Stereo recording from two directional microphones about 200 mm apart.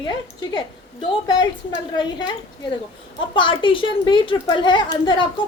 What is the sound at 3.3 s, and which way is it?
A child's voice, 25° left (ahead or behind).